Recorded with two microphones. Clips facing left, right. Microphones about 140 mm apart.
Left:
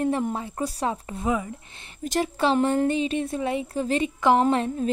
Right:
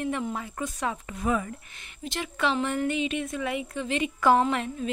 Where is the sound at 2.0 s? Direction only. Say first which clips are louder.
Left 5 dB; 40° left (ahead or behind).